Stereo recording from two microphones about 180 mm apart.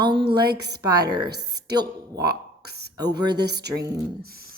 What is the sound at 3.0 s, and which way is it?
Speech, 20° right (ahead or behind).